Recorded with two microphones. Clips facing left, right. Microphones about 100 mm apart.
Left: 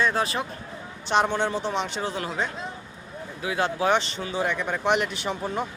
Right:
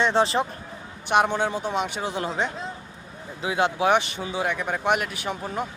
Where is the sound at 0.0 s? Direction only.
25° right (ahead or behind).